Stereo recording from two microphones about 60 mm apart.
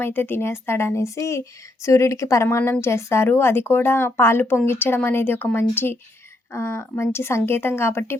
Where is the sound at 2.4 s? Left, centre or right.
Left.